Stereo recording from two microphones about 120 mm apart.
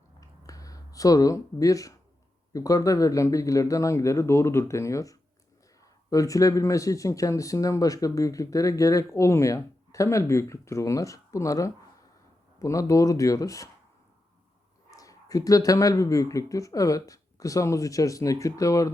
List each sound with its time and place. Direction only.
0.2 s a sound: 30° left (ahead or behind)
2.5 s speech: 30° left (ahead or behind)
14.8 s speech: 30° left (ahead or behind)